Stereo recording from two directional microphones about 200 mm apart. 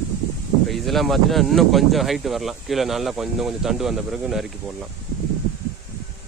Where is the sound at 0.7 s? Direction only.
Centre (ahead or behind).